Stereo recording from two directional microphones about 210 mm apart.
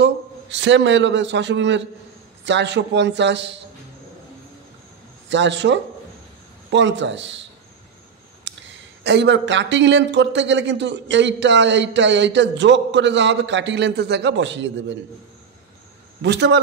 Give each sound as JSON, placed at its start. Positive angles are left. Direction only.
{"t": 0.0, "sound": "a man's voice", "side_deg": -60}
{"t": 5.3, "sound": "speech", "side_deg": -60}
{"t": 8.5, "sound": "a sound", "side_deg": -60}
{"t": 9.0, "sound": "speech", "side_deg": -55}
{"t": 16.2, "sound": "speech", "side_deg": -55}